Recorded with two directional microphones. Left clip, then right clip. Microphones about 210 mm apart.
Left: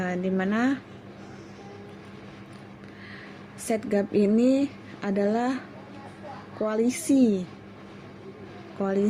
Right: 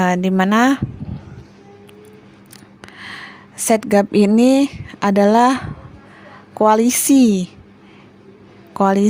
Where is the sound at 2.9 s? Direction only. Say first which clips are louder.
Right 12 dB; 50° right (ahead or behind).